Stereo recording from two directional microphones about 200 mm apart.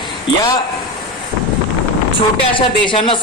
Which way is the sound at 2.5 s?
25° left (ahead or behind).